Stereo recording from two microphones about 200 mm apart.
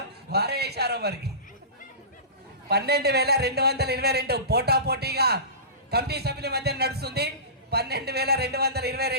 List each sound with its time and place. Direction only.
0.3 s a man's voice: 55° right (ahead or behind)
2.6 s a man's voice: 55° right (ahead or behind)